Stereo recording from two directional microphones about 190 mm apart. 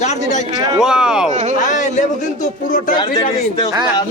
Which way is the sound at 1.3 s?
40° right (ahead or behind).